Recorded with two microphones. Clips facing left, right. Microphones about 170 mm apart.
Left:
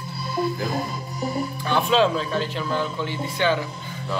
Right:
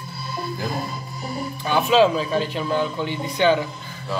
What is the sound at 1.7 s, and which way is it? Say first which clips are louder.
Speech: right 3 dB; 5° right (ahead or behind).